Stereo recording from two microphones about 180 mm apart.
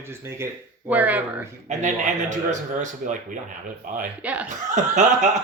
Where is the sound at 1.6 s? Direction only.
40° right (ahead or behind).